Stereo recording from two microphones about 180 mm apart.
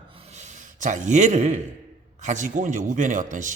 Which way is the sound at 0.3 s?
40° right (ahead or behind).